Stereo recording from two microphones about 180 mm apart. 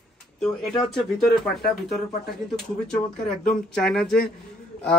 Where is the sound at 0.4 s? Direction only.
5° left (ahead or behind).